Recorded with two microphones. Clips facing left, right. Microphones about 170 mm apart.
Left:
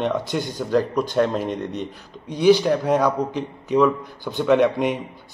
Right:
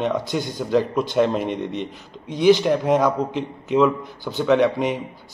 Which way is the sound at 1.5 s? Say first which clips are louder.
Right 1 dB; 45° left (ahead or behind).